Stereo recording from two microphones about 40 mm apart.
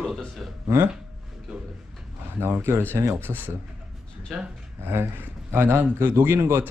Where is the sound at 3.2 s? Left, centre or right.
Right.